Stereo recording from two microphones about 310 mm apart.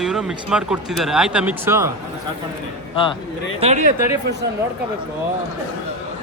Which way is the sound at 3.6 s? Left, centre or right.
Right.